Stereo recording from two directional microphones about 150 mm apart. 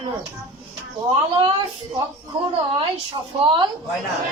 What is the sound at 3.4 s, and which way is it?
Speech, 35° right (ahead or behind).